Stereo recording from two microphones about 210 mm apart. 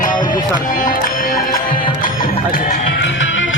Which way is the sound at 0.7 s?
40° left (ahead or behind).